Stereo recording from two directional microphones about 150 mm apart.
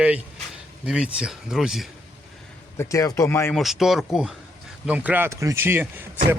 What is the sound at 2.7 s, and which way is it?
Speech, 20° left (ahead or behind).